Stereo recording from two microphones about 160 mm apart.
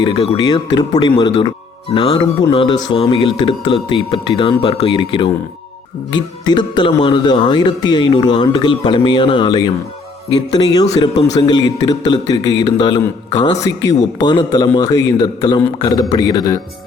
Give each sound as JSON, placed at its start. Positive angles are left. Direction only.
{"t": 0.0, "sound": "speech", "side_deg": 30}